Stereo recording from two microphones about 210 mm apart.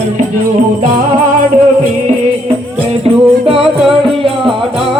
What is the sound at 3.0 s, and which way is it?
Music, 25° right (ahead or behind).